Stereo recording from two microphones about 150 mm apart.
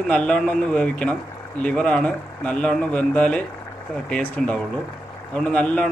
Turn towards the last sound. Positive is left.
turn(degrees=10)  # may be behind; listen again after turning